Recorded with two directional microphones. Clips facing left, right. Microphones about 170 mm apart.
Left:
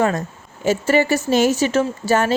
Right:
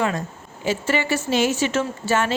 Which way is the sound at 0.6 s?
45° left (ahead or behind).